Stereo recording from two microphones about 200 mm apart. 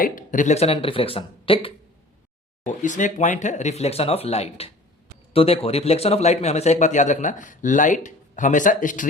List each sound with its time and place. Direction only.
0.0 s speech: 40° left (ahead or behind)
2.6 s a man's voice: 40° left (ahead or behind)